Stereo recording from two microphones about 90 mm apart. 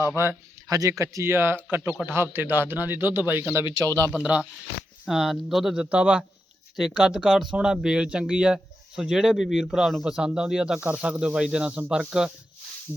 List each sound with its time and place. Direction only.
0.7 s a man's voice: 40° right (ahead or behind)
4.1 s speech: 10° right (ahead or behind)